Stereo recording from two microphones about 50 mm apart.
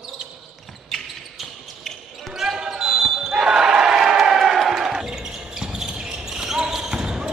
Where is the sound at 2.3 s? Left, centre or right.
Centre.